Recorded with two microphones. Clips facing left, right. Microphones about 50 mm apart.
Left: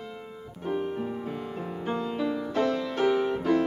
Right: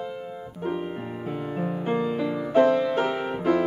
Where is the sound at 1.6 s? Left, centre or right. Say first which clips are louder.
Right 6 dB; right.